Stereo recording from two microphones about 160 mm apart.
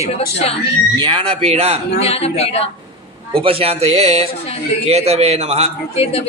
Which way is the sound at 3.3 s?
35° right (ahead or behind).